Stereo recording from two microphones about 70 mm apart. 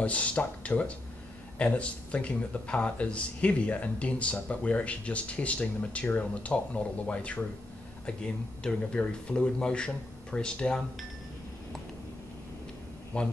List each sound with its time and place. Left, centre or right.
0.0 s speech: centre
13.1 s speech: centre